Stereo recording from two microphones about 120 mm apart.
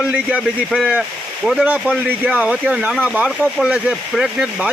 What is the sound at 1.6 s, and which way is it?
Speech, 15° right (ahead or behind).